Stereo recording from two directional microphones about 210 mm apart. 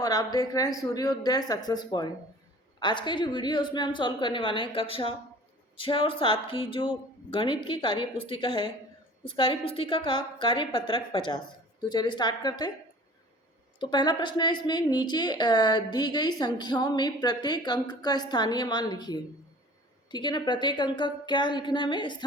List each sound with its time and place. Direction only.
0.0 s a woman's voice: 15° left (ahead or behind)
13.7 s a woman's voice: 20° left (ahead or behind)